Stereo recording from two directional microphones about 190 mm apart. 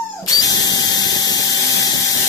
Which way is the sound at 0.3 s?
20° left (ahead or behind).